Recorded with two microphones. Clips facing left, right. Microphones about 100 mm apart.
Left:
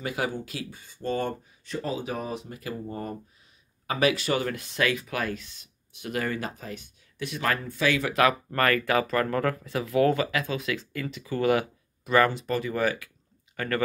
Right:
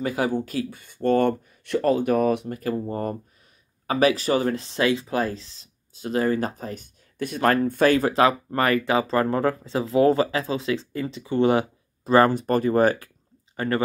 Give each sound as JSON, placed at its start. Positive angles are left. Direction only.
{"t": 0.0, "sound": "speech", "side_deg": -35}
{"t": 8.2, "sound": "speech", "side_deg": -25}
{"t": 12.4, "sound": "speech", "side_deg": -45}